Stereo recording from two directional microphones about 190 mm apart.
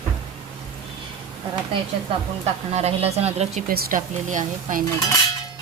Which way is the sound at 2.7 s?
35° right (ahead or behind).